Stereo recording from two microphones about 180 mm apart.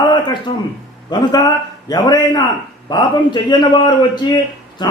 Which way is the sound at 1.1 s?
20° left (ahead or behind).